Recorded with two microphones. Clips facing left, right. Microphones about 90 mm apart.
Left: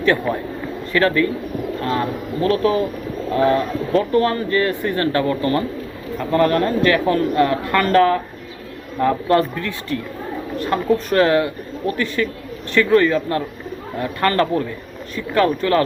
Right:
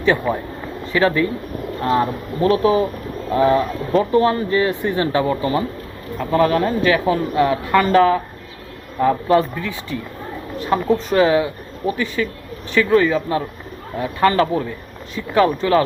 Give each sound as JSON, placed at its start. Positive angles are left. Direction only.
{"t": 0.0, "sound": "speech", "side_deg": -15}
{"t": 1.8, "sound": "speech", "side_deg": -30}